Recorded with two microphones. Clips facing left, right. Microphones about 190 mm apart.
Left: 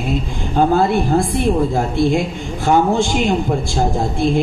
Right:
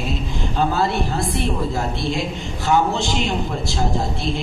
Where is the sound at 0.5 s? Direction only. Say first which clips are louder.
Left 7 dB; 50° left (ahead or behind).